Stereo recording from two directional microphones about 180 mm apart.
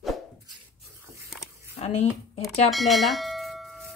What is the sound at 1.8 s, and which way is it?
Speech, 35° left (ahead or behind).